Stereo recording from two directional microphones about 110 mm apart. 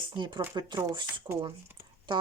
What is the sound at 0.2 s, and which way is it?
Speech, 45° right (ahead or behind).